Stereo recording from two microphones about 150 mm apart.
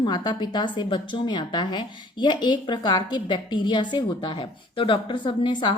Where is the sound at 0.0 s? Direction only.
30° left (ahead or behind).